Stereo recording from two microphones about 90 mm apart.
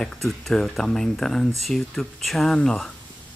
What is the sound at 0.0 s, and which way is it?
Speech, 5° left (ahead or behind).